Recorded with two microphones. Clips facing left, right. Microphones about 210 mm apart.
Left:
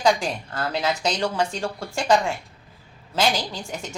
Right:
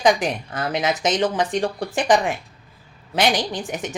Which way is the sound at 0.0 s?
20° right (ahead or behind).